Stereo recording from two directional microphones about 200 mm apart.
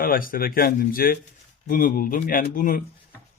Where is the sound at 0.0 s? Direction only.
45° left (ahead or behind).